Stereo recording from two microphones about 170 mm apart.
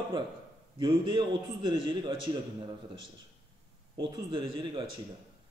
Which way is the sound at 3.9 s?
25° right (ahead or behind).